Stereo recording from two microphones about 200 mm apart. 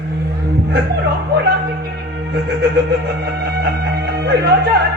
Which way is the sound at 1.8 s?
55° right (ahead or behind).